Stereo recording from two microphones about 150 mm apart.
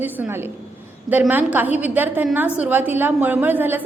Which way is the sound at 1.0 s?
10° right (ahead or behind).